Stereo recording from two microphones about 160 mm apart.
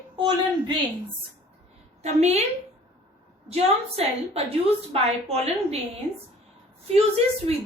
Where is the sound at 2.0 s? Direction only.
40° right (ahead or behind).